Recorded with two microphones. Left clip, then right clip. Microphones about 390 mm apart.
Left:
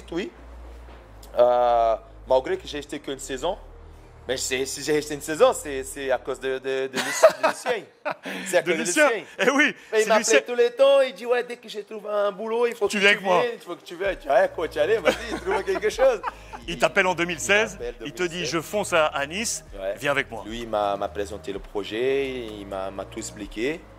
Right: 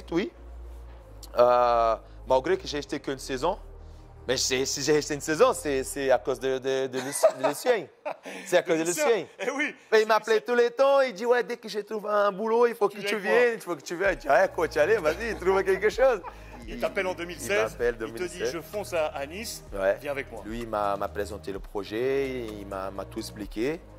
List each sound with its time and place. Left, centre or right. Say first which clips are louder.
1.3 s speech: left 2 dB; right
7.0 s speech: left 8 dB; left
8.5 s speech: left 1 dB; right
9.4 s a man's voice: left 9 dB; left
9.8 s speech: left 2 dB; right
13.0 s speech: left 10 dB; left
13.4 s speech: right 2 dB; right
16.3 s speech: left 9 dB; left
17.7 s speech: right 5 dB; right
18.1 s speech: left 5 dB; left
20.4 s speech: right 1 dB; right